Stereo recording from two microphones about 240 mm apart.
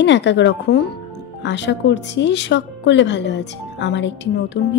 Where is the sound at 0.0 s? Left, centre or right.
Left.